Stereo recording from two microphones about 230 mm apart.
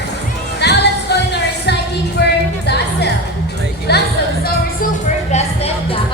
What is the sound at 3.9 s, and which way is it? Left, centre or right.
Music, left.